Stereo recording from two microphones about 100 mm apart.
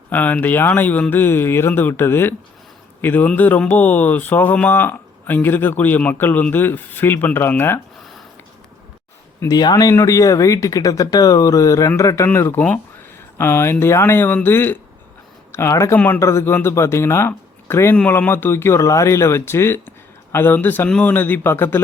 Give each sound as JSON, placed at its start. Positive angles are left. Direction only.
{"t": 0.1, "sound": "speech", "side_deg": 15}
{"t": 9.5, "sound": "speech", "side_deg": 40}